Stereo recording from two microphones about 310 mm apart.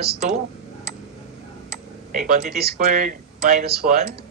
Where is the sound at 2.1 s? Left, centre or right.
Right.